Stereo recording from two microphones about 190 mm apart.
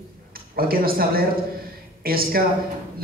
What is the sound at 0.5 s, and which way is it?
A man's voice, 50° right (ahead or behind).